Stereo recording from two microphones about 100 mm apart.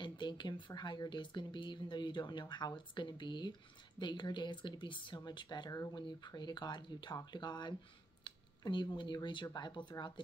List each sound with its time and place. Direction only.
0.0 s speech: 50° left (ahead or behind)